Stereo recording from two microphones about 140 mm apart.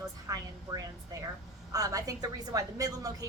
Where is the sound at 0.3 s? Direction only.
25° right (ahead or behind).